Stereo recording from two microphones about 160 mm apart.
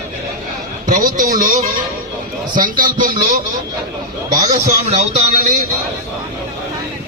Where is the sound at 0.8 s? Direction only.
60° right (ahead or behind).